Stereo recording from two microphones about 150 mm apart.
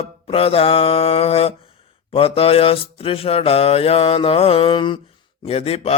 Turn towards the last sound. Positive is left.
turn(degrees=40)  # may be behind; listen again after turning